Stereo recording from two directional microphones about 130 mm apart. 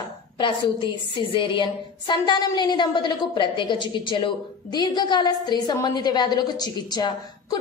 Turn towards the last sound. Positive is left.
turn(degrees=30)  # may be behind; listen again after turning